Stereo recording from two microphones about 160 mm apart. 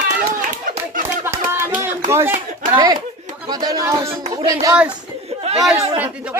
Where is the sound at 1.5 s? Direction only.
15° right (ahead or behind).